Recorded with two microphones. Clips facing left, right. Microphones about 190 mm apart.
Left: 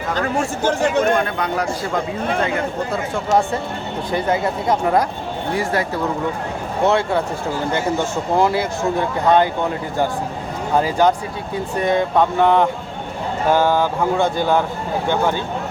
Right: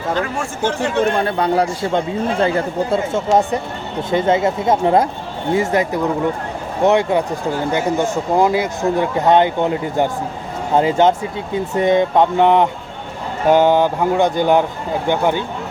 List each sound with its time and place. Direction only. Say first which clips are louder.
0.2 s speech: even; 40° left (ahead or behind)
1.2 s a man's voice: right 5 dB; 30° right (ahead or behind)